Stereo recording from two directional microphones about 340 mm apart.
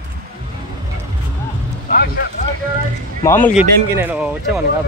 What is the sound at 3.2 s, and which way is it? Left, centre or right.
Speech, centre.